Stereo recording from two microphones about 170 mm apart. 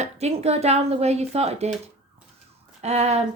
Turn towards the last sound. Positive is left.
turn(degrees=-40)  # may be behind; listen again after turning